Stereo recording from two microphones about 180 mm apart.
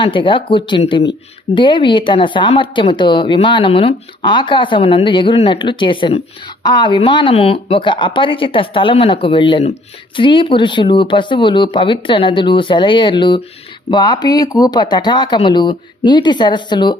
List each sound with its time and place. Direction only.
0.0 s a woman's voice: 30° left (ahead or behind)